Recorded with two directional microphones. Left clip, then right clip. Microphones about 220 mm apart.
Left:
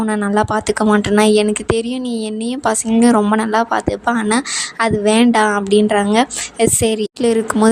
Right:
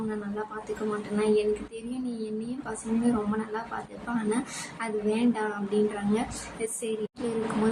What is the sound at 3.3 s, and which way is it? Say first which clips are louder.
Speech: left 17 dB; 50° left (ahead or behind).